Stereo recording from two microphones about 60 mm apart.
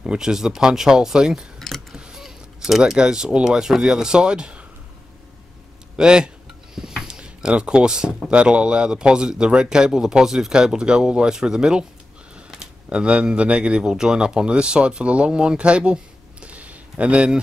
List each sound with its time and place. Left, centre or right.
0.0 s speech: centre
1.6 s a sound: centre
2.0 s speech: centre
5.9 s speech: centre